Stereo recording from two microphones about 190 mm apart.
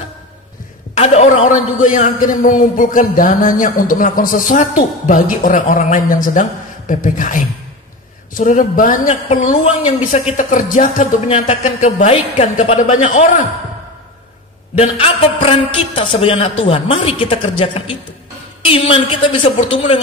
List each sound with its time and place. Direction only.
0.9 s a man's voice: 35° left (ahead or behind)
14.8 s a man's voice: 30° left (ahead or behind)